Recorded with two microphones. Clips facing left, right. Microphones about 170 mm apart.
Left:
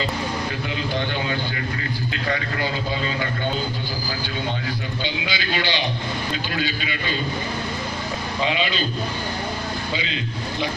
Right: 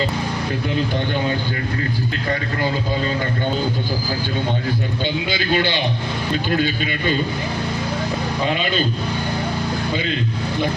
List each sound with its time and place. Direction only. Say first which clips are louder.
5.0 s a man's voice: right 6 dB; 50° right (ahead or behind)
8.4 s a man's voice: right 1 dB; 50° right (ahead or behind)